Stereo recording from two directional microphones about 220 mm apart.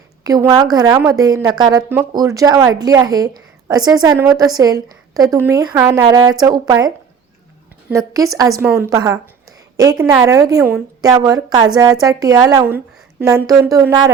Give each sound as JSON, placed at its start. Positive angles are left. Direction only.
{"t": 0.3, "sound": "a woman's voice", "side_deg": -15}